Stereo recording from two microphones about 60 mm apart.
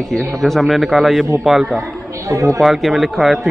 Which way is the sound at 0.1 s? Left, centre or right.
Centre.